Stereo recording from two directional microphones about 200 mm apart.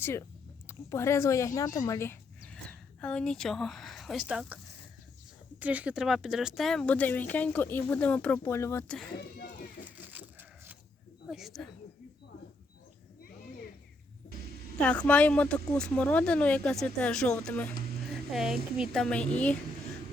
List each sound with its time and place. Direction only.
0.0 s speech: 15° left (ahead or behind)
9.8 s sheep: 10° right (ahead or behind)
11.3 s speech: centre (ahead or behind)
14.8 s speech: 5° left (ahead or behind)